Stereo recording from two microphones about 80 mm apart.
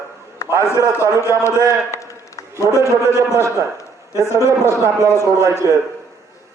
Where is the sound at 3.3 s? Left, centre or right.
Right.